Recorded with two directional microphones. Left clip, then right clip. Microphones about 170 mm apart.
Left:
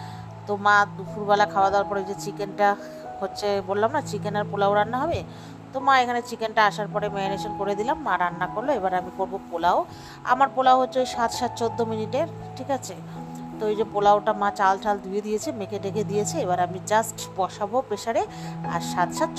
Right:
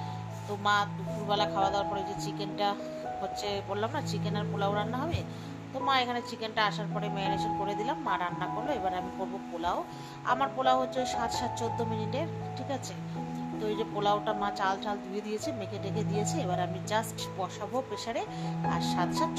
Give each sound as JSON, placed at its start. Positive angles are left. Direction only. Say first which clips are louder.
{"t": 0.5, "sound": "a woman's voice", "louder": "left 9 dB", "side_deg": 45}